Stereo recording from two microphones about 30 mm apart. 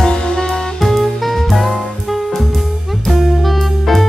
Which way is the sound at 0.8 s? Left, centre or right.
Centre.